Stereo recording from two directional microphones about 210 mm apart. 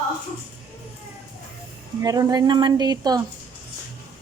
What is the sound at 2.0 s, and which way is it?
A woman's voice, 15° right (ahead or behind).